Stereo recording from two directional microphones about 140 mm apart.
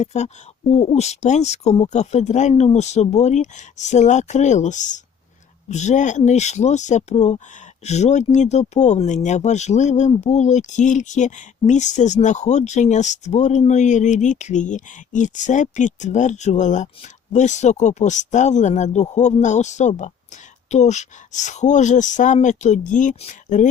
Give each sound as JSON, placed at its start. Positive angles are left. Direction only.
{"t": 0.0, "sound": "speech", "side_deg": 55}